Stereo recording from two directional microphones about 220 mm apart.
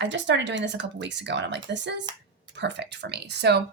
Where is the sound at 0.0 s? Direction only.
55° right (ahead or behind).